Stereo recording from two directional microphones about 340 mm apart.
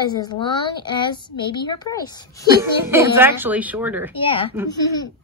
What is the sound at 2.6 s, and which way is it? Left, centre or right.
Speech, centre.